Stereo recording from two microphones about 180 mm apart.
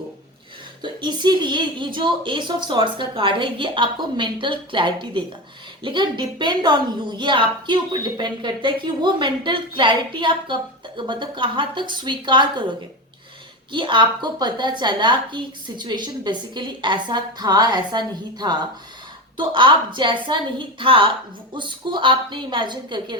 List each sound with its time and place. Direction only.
0.8 s a woman's voice: 25° right (ahead or behind)
13.7 s a woman's voice: 25° right (ahead or behind)